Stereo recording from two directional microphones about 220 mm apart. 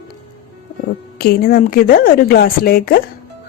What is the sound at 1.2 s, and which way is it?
Speech, 45° left (ahead or behind).